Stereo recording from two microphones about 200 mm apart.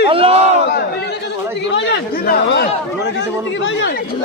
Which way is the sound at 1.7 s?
60° left (ahead or behind).